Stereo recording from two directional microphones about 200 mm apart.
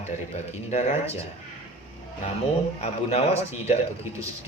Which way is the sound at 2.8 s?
30° left (ahead or behind).